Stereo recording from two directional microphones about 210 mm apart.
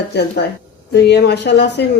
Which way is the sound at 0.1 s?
50° left (ahead or behind).